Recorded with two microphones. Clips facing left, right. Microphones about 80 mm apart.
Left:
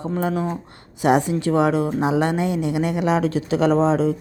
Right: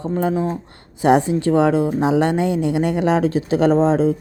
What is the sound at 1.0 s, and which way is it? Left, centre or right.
A woman's voice, right.